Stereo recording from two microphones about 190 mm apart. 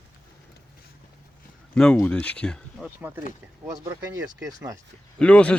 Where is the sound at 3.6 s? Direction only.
15° right (ahead or behind).